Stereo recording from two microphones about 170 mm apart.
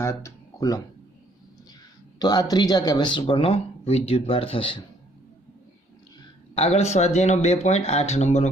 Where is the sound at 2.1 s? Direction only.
25° left (ahead or behind).